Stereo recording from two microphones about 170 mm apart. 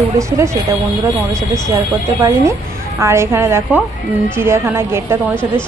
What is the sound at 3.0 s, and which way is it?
Speech, 15° right (ahead or behind).